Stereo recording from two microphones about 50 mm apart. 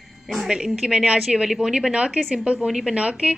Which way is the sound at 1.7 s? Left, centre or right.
Right.